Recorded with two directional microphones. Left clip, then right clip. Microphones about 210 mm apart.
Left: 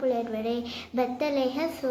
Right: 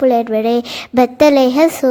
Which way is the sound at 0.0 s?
45° right (ahead or behind).